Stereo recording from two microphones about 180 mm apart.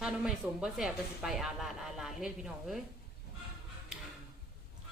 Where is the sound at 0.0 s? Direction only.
5° right (ahead or behind).